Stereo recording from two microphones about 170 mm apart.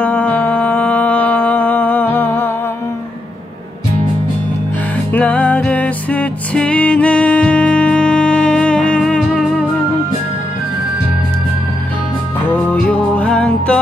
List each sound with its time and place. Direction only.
0.0 s music: 10° left (ahead or behind)
5.1 s music: 10° left (ahead or behind)
12.4 s music: 10° left (ahead or behind)